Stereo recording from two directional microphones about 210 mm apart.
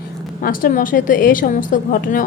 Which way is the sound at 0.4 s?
40° left (ahead or behind).